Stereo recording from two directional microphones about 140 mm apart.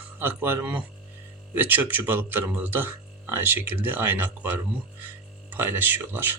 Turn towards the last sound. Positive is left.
turn(degrees=-15)  # may be behind; listen again after turning